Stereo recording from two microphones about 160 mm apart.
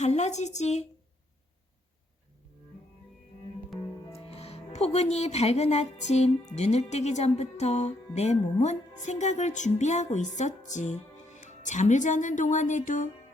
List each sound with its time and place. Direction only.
0.0 s speech: 45° left (ahead or behind)
4.3 s speech: 40° left (ahead or behind)